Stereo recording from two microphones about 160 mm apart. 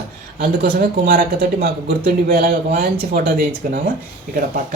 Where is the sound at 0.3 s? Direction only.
65° right (ahead or behind).